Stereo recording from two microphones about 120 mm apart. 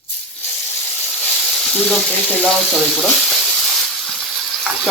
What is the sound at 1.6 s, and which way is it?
Speech, centre (ahead or behind).